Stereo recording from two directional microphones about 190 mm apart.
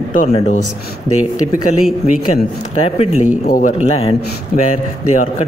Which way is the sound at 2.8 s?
35° left (ahead or behind).